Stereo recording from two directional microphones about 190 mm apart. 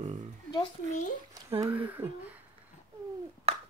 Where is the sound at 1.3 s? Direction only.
20° right (ahead or behind).